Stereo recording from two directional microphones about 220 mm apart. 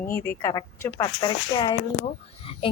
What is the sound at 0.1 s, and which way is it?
A woman's voice, 10° left (ahead or behind).